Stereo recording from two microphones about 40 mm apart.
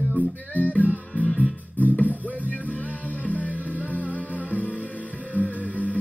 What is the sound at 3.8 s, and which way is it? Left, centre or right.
Music, left.